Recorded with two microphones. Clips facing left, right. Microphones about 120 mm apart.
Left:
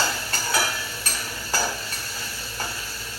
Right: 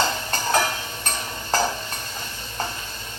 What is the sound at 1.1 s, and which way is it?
Stir, 20° right (ahead or behind).